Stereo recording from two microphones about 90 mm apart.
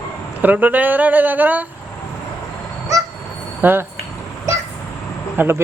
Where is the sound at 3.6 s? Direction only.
20° right (ahead or behind).